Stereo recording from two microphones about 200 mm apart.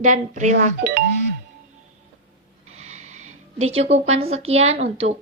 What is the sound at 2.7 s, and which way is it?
A woman's voice, 35° right (ahead or behind).